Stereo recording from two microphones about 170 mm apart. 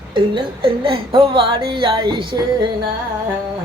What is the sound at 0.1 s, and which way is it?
A woman's voice, 30° right (ahead or behind).